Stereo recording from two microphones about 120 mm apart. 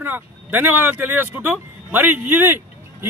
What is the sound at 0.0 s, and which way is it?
Speech, 15° right (ahead or behind).